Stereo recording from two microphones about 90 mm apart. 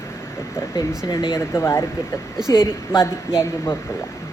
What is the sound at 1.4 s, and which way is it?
Speech, 30° left (ahead or behind).